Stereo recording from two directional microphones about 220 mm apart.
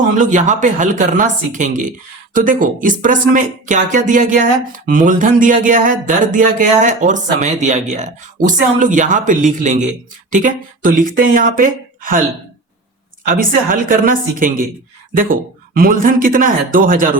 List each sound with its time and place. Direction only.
0.2 s speech: 35° right (ahead or behind)
13.2 s speech: 40° right (ahead or behind)